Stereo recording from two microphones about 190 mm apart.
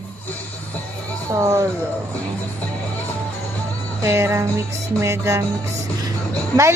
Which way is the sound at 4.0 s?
15° right (ahead or behind).